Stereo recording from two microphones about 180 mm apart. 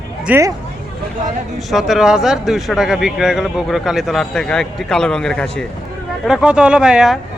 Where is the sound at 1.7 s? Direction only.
Centre (ahead or behind).